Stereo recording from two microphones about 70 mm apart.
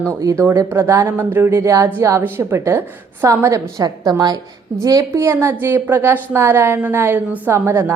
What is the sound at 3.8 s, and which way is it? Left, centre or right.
Speech, right.